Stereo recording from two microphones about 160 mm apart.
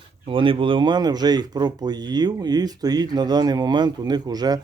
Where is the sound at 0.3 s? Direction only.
30° right (ahead or behind).